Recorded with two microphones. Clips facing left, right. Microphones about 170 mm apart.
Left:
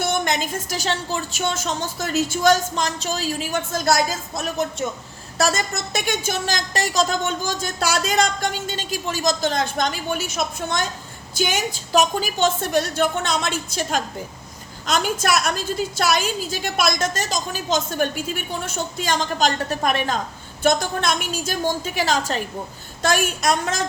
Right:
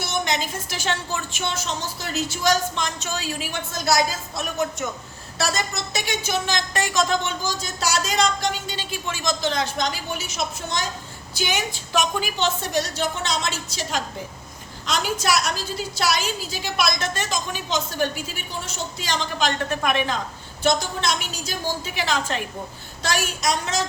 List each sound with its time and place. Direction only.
0.0 s a woman's voice: 50° left (ahead or behind)
3.8 s a woman's voice: 50° left (ahead or behind)
4.4 s speech: 35° left (ahead or behind)
5.4 s a woman's voice: 50° left (ahead or behind)
20.7 s a woman's voice: 55° left (ahead or behind)
23.0 s a woman's voice: 55° left (ahead or behind)